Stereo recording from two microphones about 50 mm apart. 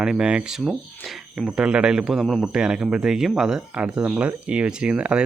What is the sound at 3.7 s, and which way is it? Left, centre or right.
Speech, right.